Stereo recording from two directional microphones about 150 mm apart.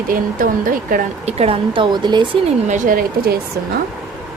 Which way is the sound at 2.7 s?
65° right (ahead or behind).